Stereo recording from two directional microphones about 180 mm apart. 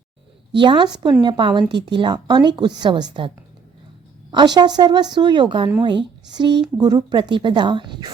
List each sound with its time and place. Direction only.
0.5 s speech: 30° right (ahead or behind)